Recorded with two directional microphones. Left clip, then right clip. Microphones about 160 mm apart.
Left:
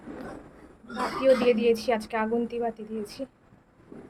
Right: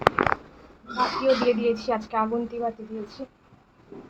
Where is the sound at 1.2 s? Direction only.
20° left (ahead or behind).